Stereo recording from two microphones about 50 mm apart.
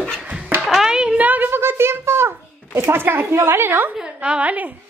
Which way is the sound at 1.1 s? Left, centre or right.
Right.